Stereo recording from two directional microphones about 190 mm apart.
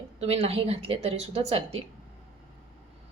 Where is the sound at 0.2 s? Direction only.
30° right (ahead or behind).